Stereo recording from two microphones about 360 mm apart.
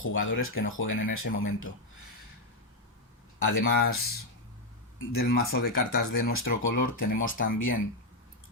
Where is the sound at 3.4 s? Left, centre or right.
Left.